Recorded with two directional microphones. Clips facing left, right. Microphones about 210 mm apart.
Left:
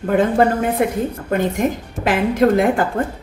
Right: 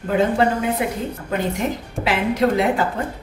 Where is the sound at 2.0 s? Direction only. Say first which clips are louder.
Left 4 dB; 50° left (ahead or behind).